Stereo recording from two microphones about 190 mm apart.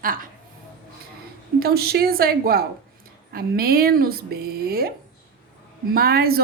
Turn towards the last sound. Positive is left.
turn(degrees=-55)  # may be behind; listen again after turning